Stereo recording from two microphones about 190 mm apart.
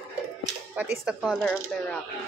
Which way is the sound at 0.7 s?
10° right (ahead or behind).